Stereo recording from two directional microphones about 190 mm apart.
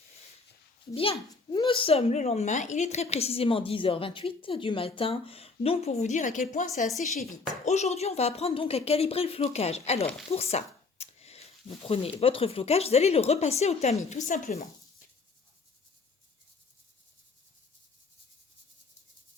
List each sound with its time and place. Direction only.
0.9 s speech: 30° left (ahead or behind)